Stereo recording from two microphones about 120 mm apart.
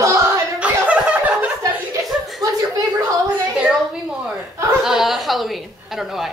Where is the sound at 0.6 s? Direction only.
10° right (ahead or behind).